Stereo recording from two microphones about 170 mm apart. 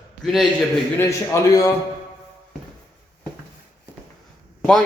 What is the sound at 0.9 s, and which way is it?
Speech, 15° left (ahead or behind).